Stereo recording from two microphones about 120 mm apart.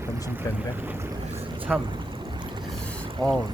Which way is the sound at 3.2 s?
5° left (ahead or behind).